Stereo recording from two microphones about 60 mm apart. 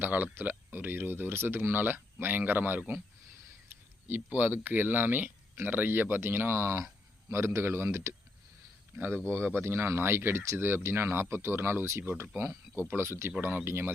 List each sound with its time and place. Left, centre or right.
0.0 s speech: right